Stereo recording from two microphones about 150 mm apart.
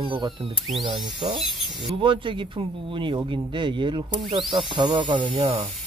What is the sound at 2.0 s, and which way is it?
A man's voice, 35° right (ahead or behind).